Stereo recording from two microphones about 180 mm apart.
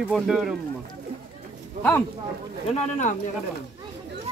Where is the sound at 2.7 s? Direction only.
40° left (ahead or behind).